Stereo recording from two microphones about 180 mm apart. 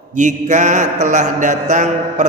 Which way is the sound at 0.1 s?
45° right (ahead or behind).